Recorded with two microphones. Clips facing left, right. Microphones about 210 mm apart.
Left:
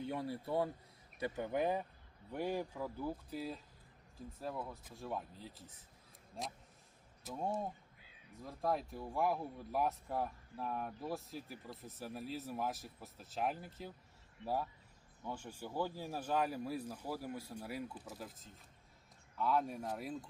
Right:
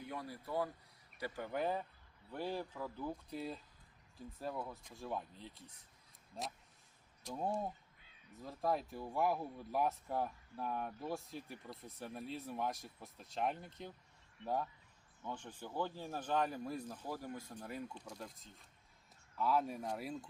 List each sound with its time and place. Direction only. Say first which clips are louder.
0.0 s speech: left 6 dB; 25° left (ahead or behind); by 20.2 s centre (ahead or behind)